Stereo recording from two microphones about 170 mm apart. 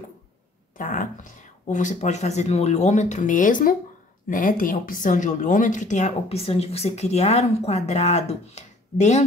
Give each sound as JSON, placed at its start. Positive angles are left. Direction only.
{"t": 0.7, "sound": "a woman's voice", "side_deg": 50}